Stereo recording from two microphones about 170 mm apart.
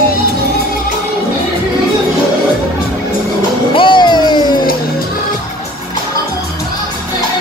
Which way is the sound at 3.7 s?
30° left (ahead or behind).